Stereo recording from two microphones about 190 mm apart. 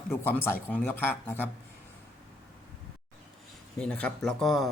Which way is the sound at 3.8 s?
5° left (ahead or behind).